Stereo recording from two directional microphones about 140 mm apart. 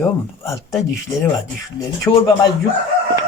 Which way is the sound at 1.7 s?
25° left (ahead or behind).